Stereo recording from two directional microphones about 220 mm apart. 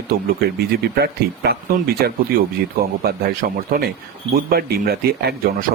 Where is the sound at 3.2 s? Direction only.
40° right (ahead or behind).